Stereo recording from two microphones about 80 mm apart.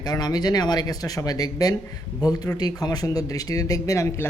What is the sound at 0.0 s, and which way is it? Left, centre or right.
Speech, left.